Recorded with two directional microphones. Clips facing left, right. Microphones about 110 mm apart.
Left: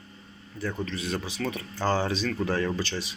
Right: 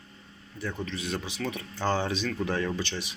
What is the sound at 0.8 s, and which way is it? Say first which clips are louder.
Speech: left 2 dB; 20° right (ahead or behind).